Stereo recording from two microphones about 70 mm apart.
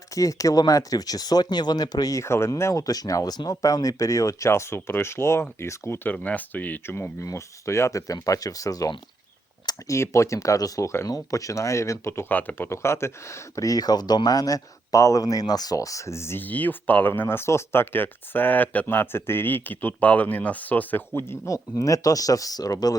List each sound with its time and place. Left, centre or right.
0.1 s speech: left
2.2 s speech: left
2.8 s speech: left
6.0 s speech: left
7.2 s speech: left
9.8 s speech: left
12.3 s speech: left
13.6 s speech: left
16.4 s speech: left
21.5 s speech: left